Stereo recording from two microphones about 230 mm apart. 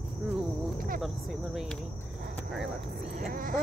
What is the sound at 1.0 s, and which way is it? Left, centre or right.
Speech, centre.